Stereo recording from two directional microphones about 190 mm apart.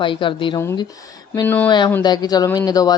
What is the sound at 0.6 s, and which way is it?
Speech, 15° left (ahead or behind).